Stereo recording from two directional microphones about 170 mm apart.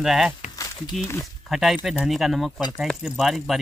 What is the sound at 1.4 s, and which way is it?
Speech, centre (ahead or behind).